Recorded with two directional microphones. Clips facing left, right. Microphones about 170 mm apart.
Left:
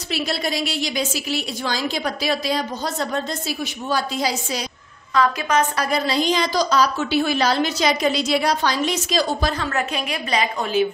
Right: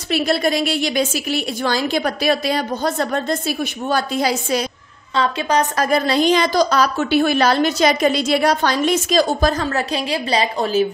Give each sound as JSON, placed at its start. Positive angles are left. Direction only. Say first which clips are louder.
{"t": 0.1, "sound": "a woman's voice", "louder": "right 7 dB", "side_deg": -55}
{"t": 5.1, "sound": "a woman's voice", "louder": "right 1 dB", "side_deg": -30}